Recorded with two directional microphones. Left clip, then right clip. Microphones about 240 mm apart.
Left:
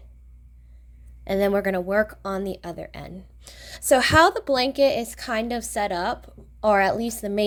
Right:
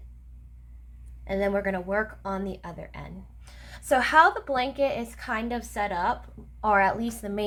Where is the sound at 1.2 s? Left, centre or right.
Left.